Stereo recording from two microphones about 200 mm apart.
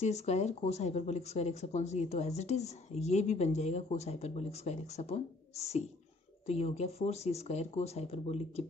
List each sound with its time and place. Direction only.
0.0 s speech: 35° left (ahead or behind)